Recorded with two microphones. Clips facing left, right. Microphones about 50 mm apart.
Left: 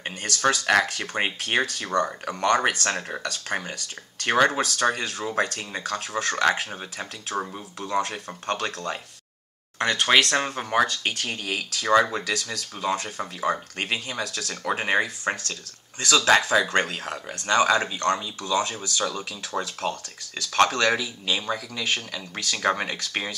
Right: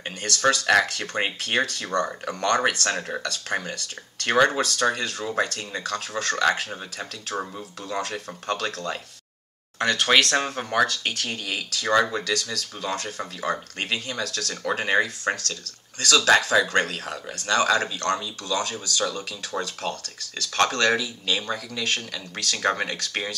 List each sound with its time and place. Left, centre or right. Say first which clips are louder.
0.0 s a sound: right 1 dB; centre
0.4 s speech: right 1 dB; centre
8.5 s speech: even; left
9.8 s speech: even; left
11.2 s speech: left 1 dB; centre
19.0 s speech: even; centre